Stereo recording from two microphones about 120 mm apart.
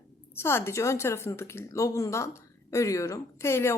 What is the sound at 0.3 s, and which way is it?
Speech, 20° left (ahead or behind).